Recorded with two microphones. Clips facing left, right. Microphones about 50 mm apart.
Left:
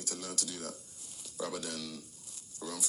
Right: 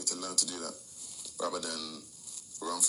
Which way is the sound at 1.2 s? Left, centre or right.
Left.